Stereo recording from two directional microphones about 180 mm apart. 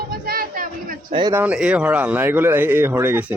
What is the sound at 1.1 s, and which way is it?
Speech, 25° right (ahead or behind).